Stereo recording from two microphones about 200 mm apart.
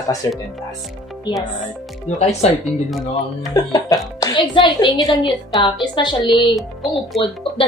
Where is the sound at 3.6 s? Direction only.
20° left (ahead or behind).